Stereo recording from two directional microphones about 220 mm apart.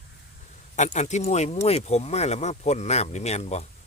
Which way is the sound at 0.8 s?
35° left (ahead or behind).